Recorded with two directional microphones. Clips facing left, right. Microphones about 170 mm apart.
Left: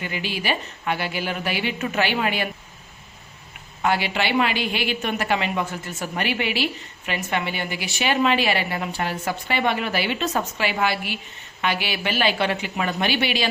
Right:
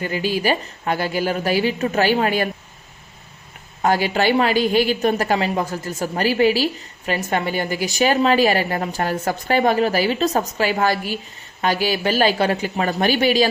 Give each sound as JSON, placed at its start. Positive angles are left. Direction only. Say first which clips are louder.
{"t": 0.0, "sound": "a woman's voice", "louder": "right 7 dB", "side_deg": -40}
{"t": 3.8, "sound": "a woman's voice", "louder": "right 5 dB", "side_deg": -40}